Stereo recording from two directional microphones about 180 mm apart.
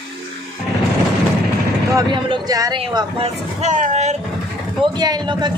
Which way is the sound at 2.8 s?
35° right (ahead or behind).